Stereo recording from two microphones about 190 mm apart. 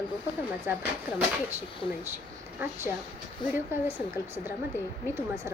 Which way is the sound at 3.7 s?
10° right (ahead or behind).